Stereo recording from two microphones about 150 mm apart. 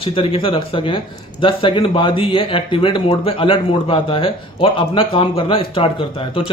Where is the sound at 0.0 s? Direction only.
35° left (ahead or behind).